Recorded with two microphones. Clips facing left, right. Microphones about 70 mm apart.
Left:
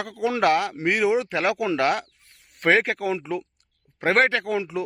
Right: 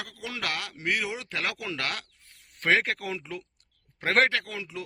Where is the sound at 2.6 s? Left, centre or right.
Centre.